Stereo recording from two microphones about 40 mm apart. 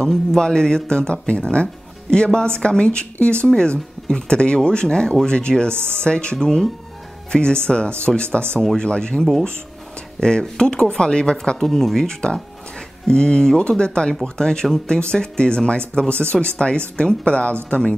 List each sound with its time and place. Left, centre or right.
0.4 s speech: centre
5.8 s speech: right
6.0 s speech: left
6.3 s speech: centre
7.3 s speech: left
8.7 s speech: left
11.6 s speech: centre; by 17.9 s left